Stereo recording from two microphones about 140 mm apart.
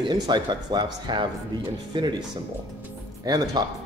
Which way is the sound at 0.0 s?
30° right (ahead or behind).